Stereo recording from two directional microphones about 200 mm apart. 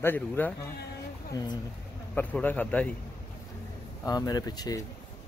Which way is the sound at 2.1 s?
10° left (ahead or behind).